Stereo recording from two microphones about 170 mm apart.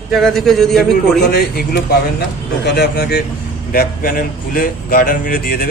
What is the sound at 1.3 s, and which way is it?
Speech, 70° left (ahead or behind).